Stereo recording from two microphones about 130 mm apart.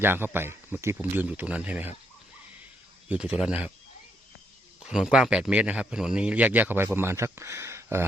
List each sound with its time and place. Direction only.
0.0 s speech: 15° right (ahead or behind)
3.1 s speech: 10° right (ahead or behind)
4.8 s speech: 5° right (ahead or behind); by 8.0 s 20° right (ahead or behind)